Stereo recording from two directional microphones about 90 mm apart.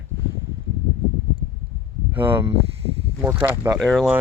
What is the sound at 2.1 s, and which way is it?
Speech, 20° right (ahead or behind).